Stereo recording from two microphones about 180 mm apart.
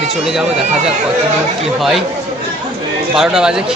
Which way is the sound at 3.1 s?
5° right (ahead or behind).